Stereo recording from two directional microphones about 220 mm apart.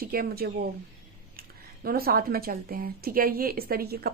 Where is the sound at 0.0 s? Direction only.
40° right (ahead or behind).